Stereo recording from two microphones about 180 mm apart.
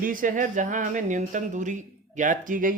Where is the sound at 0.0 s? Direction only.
50° right (ahead or behind).